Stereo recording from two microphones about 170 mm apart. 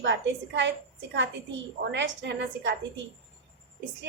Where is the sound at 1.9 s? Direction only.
90° right.